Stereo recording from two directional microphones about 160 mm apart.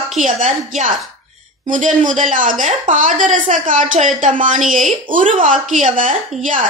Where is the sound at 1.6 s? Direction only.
50° right (ahead or behind).